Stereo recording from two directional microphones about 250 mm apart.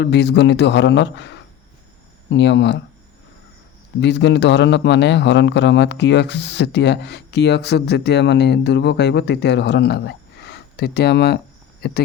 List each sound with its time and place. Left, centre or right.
0.0 s a man's voice: left
4.0 s a man's voice: left